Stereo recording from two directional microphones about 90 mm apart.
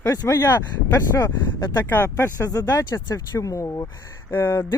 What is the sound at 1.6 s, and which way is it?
Speech, 55° left (ahead or behind).